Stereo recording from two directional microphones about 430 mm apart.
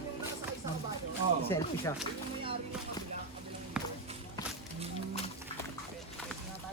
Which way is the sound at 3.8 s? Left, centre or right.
Centre.